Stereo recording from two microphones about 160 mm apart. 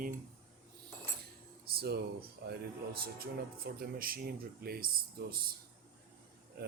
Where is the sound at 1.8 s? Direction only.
90° right.